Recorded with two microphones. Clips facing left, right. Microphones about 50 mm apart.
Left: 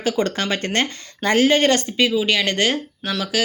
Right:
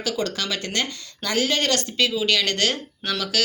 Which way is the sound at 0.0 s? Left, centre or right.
Left.